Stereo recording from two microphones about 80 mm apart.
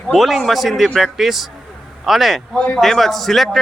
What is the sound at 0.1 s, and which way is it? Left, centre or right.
A man's voice, centre.